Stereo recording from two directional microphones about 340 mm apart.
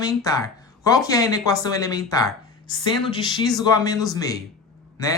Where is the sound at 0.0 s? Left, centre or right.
Centre.